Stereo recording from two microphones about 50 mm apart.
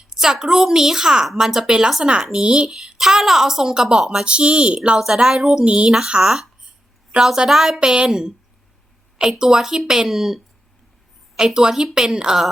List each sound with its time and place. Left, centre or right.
0.1 s a woman's voice: centre
2.6 s a woman's voice: centre
4.9 s a woman's voice: centre
9.4 s a woman's voice: centre